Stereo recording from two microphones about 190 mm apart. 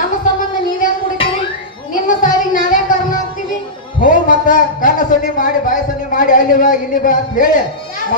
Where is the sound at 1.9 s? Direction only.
45° left (ahead or behind).